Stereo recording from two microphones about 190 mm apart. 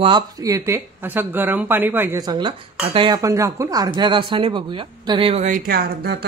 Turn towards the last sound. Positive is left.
turn(degrees=-55)  # may be behind; listen again after turning